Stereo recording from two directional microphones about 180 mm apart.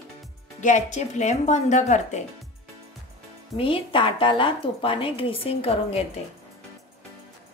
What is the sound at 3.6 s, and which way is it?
A woman's voice, 30° left (ahead or behind).